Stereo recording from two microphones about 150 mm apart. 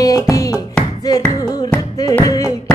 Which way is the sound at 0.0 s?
25° left (ahead or behind).